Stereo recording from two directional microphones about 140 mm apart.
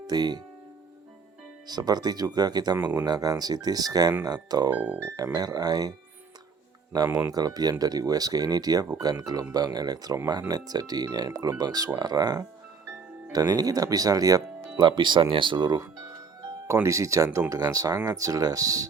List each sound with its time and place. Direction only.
0.1 s speech: 30° right (ahead or behind)
1.6 s speech: 30° right (ahead or behind)
2.7 s speech: 15° right (ahead or behind)
3.1 s speech: 25° right (ahead or behind)
4.7 s speech: 10° right (ahead or behind)
5.1 s speech: 25° right (ahead or behind)
6.9 s speech: 30° right (ahead or behind)